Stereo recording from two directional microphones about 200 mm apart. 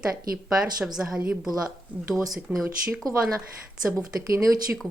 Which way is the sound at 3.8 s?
10° right (ahead or behind).